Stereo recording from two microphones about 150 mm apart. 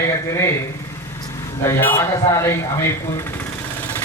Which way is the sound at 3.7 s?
10° left (ahead or behind).